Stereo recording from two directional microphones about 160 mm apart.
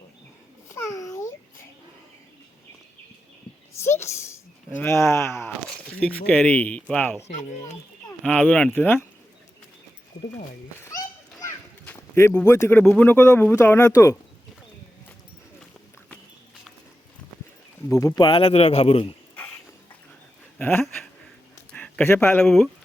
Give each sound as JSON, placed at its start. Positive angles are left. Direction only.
{"t": 0.7, "sound": "babbling", "side_deg": 20}
{"t": 4.0, "sound": "speech", "side_deg": 15}
{"t": 5.6, "sound": "speech", "side_deg": 5}
{"t": 7.3, "sound": "speech", "side_deg": 50}
{"t": 8.2, "sound": "speech", "side_deg": 5}
{"t": 10.8, "sound": "children playing", "side_deg": 20}
{"t": 11.9, "sound": "speech", "side_deg": 15}
{"t": 12.8, "sound": "speech", "side_deg": 5}
{"t": 17.8, "sound": "speech", "side_deg": 20}
{"t": 20.6, "sound": "speech", "side_deg": 15}
{"t": 20.8, "sound": "a sound", "side_deg": 0}
{"t": 22.4, "sound": "speech", "side_deg": 0}